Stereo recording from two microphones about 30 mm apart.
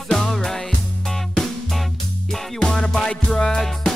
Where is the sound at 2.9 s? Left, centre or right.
Centre.